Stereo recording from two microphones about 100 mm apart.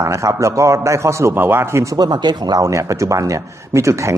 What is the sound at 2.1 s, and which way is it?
A man's voice, 45° right (ahead or behind).